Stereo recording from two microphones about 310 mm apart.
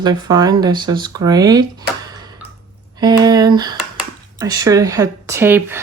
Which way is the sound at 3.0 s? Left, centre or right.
Centre.